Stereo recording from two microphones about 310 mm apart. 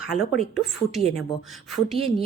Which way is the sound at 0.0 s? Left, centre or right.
Centre.